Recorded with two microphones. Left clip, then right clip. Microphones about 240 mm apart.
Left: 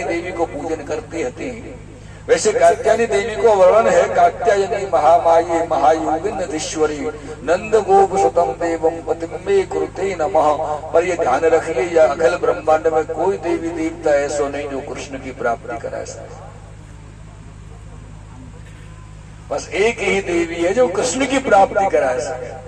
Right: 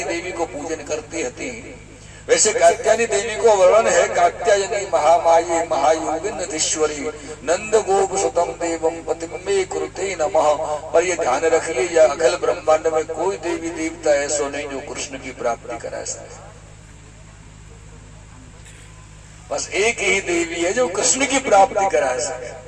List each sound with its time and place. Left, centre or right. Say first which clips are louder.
0.0 s a man's voice: left 3 dB; right
19.5 s a man's voice: left 2 dB; right